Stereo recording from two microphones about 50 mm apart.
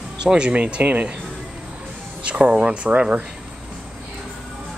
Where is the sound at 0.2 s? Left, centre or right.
Centre.